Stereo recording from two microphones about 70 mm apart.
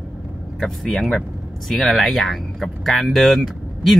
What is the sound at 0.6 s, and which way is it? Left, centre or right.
Speech, centre.